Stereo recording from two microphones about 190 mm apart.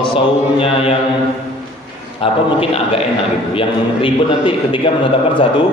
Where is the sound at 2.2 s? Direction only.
30° left (ahead or behind).